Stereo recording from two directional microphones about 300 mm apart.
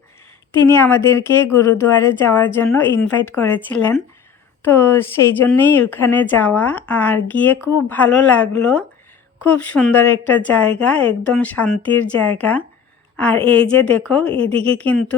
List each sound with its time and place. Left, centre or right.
0.7 s a woman's voice: centre